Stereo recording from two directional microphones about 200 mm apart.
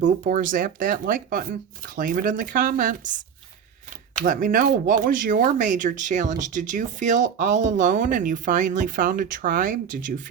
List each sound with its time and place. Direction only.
0.0 s speech: 40° right (ahead or behind)
4.2 s speech: 45° right (ahead or behind)